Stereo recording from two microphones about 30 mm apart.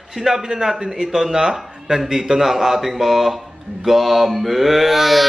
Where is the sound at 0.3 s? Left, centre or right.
Centre.